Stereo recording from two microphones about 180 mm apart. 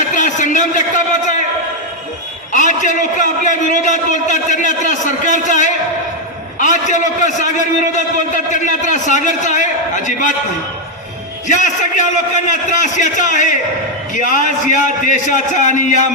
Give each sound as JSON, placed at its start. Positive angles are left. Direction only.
{"t": 0.1, "sound": "a sound", "side_deg": 45}
{"t": 2.5, "sound": "a man's voice", "side_deg": 45}
{"t": 8.5, "sound": "a man's voice", "side_deg": 45}
{"t": 11.4, "sound": "a man's voice", "side_deg": 45}